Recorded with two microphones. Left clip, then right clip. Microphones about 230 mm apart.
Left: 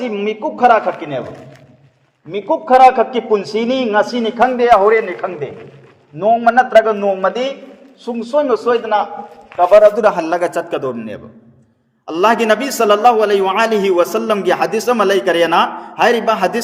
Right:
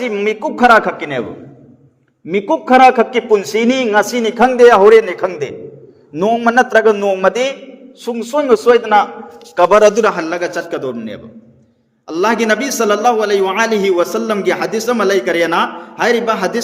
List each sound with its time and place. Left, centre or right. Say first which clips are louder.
0.0 s a man's voice: right 2 dB; right
2.3 s a man's voice: right 1 dB; right
10.0 s a man's voice: left 1 dB; centre